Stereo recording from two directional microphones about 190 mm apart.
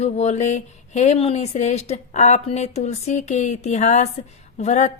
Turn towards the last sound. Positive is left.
turn(degrees=40)  # may be behind; listen again after turning